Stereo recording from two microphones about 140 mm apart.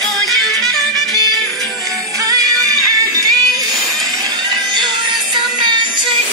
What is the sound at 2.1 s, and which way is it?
Music, 25° right (ahead or behind).